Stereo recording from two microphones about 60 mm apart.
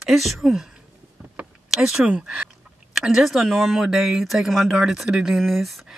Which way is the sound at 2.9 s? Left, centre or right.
Centre.